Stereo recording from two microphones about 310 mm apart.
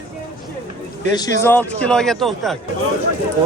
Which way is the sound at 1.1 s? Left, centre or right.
Centre.